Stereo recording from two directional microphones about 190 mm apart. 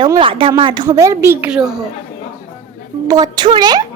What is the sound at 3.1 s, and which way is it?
Speech, 20° right (ahead or behind).